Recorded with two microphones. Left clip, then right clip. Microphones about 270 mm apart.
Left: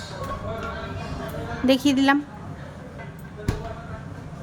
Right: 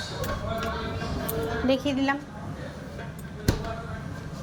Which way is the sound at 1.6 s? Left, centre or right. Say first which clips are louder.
Left 7 dB; left.